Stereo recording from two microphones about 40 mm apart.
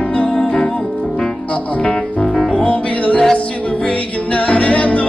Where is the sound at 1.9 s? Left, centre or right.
Centre.